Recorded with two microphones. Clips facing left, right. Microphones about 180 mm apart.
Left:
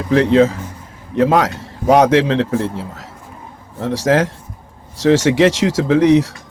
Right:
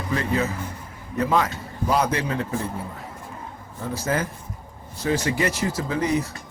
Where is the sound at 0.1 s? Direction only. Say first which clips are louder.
Left 13 dB; 90° left.